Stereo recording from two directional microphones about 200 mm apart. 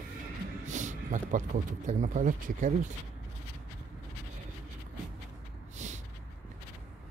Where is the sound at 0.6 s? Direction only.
35° right (ahead or behind).